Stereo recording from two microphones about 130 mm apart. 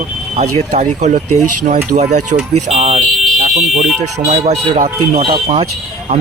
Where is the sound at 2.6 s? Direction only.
50° right (ahead or behind).